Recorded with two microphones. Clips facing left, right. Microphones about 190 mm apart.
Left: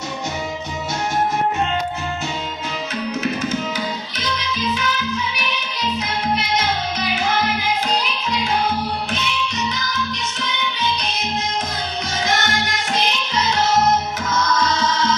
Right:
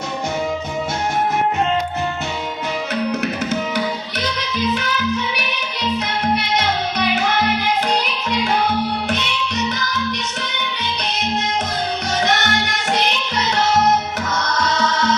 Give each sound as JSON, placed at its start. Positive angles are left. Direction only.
{"t": 9.0, "sound": "music", "side_deg": -65}